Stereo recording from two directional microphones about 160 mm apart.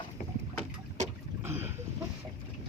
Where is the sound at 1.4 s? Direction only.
15° right (ahead or behind).